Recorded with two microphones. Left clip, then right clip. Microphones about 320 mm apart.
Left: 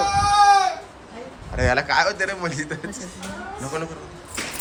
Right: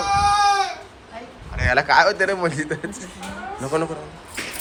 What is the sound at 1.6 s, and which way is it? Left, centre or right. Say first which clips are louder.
Speech: right 4 dB; centre.